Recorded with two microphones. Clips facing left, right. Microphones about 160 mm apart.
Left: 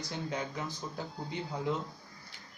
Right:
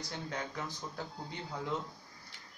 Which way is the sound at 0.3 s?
10° left (ahead or behind).